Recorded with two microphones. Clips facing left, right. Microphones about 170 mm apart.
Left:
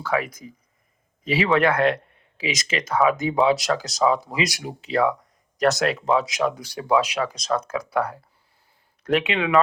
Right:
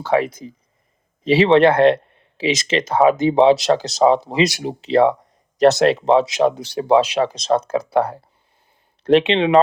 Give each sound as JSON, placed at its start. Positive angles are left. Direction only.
{"t": 0.0, "sound": "speech", "side_deg": -30}